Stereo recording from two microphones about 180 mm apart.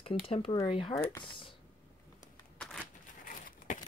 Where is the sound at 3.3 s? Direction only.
45° left (ahead or behind).